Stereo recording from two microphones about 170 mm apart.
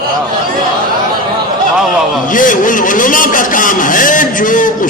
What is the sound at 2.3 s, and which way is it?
A man's voice, 50° left (ahead or behind).